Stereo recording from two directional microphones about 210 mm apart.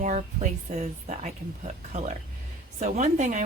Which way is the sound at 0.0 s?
35° right (ahead or behind).